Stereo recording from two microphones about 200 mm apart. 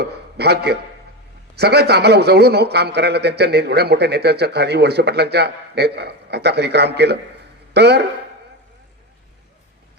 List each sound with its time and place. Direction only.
0.0 s a man's voice: 55° right (ahead or behind)